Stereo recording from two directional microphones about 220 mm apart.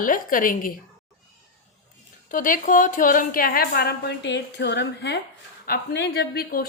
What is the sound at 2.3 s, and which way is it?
A woman's voice, 35° left (ahead or behind).